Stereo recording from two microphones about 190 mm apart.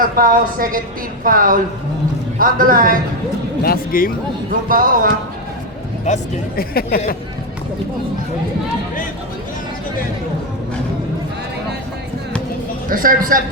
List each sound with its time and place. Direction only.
0.0 s a woman's voice: 45° right (ahead or behind)
3.6 s speech: 50° left (ahead or behind)
4.7 s a woman's voice: 45° right (ahead or behind)
6.1 s speech: 40° left (ahead or behind)
6.6 s speech: 50° left (ahead or behind)
12.9 s a woman's voice: 45° right (ahead or behind)